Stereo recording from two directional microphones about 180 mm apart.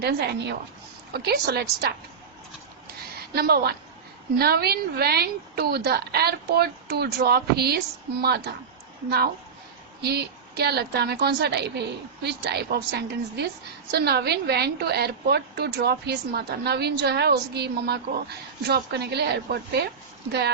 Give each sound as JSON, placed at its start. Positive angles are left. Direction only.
{"t": 0.0, "sound": "a woman's voice", "side_deg": -65}
{"t": 3.3, "sound": "a woman's voice", "side_deg": -60}